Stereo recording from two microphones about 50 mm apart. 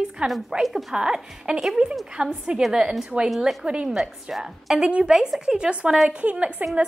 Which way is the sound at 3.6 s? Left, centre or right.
Centre.